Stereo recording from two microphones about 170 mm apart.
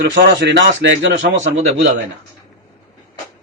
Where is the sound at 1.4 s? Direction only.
45° right (ahead or behind).